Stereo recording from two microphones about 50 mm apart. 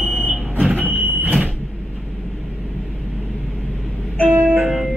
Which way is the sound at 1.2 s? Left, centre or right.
Right.